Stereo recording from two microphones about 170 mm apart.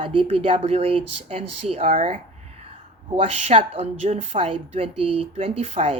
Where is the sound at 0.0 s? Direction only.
30° right (ahead or behind).